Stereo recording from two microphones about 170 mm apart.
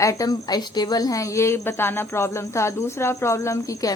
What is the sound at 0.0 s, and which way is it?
A woman's voice, 20° left (ahead or behind).